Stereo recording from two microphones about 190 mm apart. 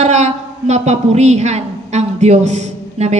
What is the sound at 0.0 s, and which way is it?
A woman's voice, 35° right (ahead or behind).